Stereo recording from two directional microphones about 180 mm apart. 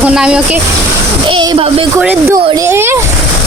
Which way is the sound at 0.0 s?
5° right (ahead or behind).